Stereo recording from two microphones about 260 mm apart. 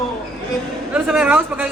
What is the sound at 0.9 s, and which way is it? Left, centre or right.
Speech, centre.